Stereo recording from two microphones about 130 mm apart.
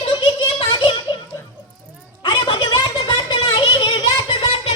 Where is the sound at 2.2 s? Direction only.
35° left (ahead or behind).